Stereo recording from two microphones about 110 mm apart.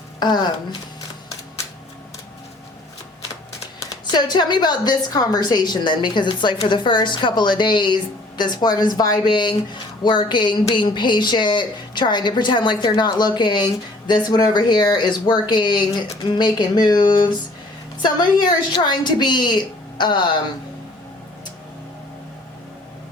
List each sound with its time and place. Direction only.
0.2 s speech: 40° left (ahead or behind)
3.8 s a woman's voice: 40° left (ahead or behind)